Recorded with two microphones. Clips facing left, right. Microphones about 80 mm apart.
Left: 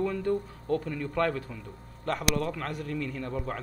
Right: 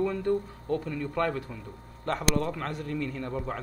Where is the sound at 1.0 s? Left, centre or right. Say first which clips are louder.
Even; centre.